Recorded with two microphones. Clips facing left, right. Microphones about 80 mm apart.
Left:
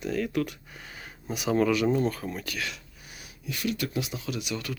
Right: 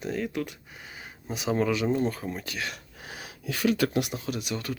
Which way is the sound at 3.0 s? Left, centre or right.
Right.